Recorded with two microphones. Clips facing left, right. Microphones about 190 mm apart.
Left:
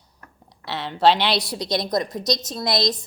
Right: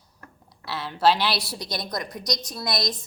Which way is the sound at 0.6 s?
20° left (ahead or behind).